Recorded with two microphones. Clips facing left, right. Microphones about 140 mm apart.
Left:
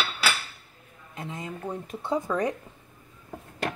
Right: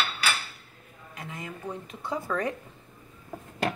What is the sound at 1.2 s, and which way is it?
Speech, 25° left (ahead or behind).